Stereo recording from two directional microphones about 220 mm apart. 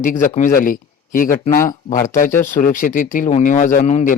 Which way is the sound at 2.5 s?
35° left (ahead or behind).